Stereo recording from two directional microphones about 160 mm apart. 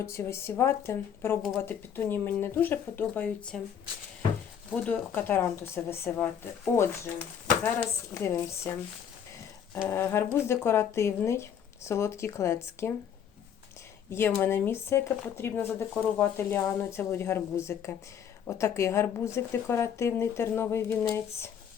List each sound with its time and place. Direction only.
0.0 s speech: 15° left (ahead or behind)
4.7 s speech: 10° left (ahead or behind)
7.6 s speech: 15° left (ahead or behind)
9.8 s speech: 15° left (ahead or behind)
14.1 s speech: 15° left (ahead or behind)